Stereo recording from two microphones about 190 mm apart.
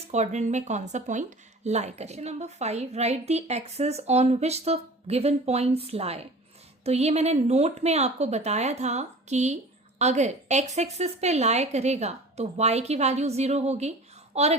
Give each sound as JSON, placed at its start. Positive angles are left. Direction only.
{"t": 0.1, "sound": "speech", "side_deg": -35}